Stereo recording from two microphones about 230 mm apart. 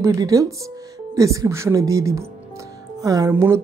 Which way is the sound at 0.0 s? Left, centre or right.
Centre.